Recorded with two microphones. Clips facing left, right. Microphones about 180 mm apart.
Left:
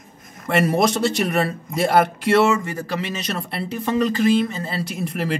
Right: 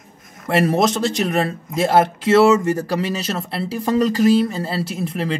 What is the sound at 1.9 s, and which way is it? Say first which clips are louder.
Speech: right 2 dB; 25° right (ahead or behind).